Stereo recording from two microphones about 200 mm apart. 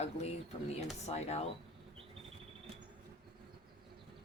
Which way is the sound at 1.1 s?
35° left (ahead or behind).